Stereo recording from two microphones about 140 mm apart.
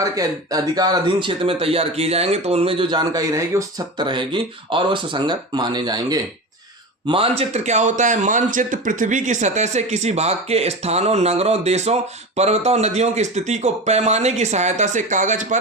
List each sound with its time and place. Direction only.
0.2 s speech: 25° right (ahead or behind)
7.1 s a man's voice: 45° right (ahead or behind); by 15.5 s 65° right (ahead or behind)